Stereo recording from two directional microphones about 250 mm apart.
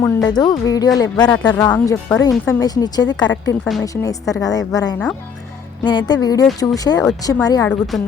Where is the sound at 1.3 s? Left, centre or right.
Centre.